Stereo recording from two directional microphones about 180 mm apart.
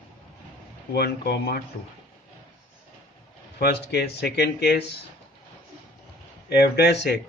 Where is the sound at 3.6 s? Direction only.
65° left (ahead or behind).